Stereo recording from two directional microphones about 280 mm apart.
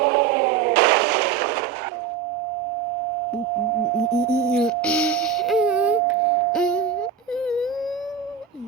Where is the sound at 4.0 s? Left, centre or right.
Centre.